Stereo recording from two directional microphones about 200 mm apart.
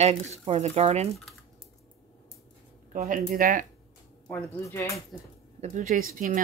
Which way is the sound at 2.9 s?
45° right (ahead or behind).